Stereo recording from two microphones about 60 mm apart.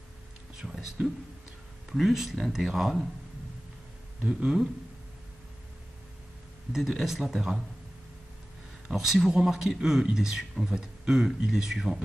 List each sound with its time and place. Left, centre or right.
1.0 s speech: centre
1.9 s speech: centre
4.2 s speech: centre
6.7 s speech: centre
8.9 s speech: centre